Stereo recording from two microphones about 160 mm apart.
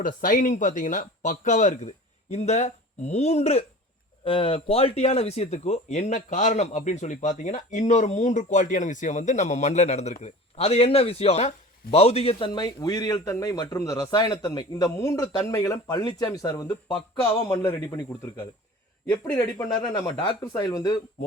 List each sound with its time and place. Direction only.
0.0 s speech: 55° left (ahead or behind); by 12.5 s 40° left (ahead or behind)
12.5 s speech: 25° left (ahead or behind)
19.3 s speech: 15° left (ahead or behind)
19.9 s speech: 25° left (ahead or behind)